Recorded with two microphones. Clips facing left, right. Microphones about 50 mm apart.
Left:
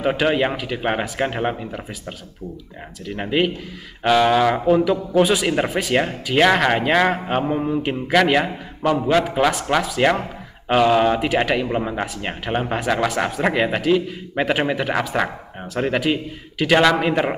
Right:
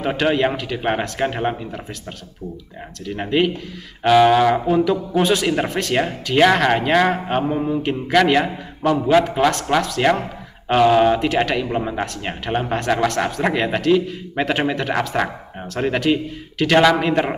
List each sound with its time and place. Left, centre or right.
0.0 s speech: centre
3.1 s speech: centre